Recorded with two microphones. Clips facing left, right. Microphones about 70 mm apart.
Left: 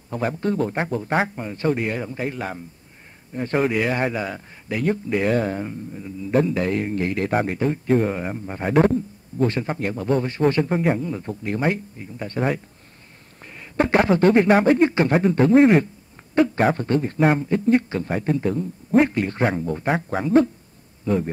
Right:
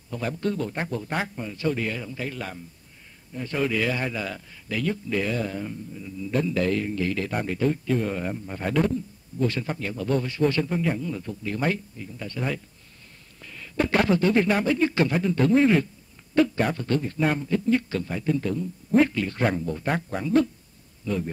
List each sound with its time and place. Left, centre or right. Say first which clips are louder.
0.1 s speech: left 4 dB; left
5.2 s speech: left 7 dB; left
8.1 s speech: left 3 dB; left
13.4 s a sound: left 4 dB; left
14.5 s speech: left 7 dB; left
21.0 s speech: left 6 dB; left